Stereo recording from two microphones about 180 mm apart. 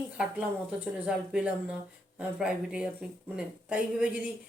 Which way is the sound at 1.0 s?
5° right (ahead or behind).